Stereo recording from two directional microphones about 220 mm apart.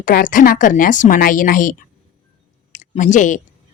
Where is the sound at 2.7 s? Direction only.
35° left (ahead or behind).